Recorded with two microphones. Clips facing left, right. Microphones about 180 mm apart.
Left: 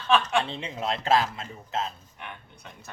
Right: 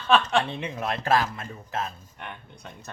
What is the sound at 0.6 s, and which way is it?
Speech, 20° left (ahead or behind).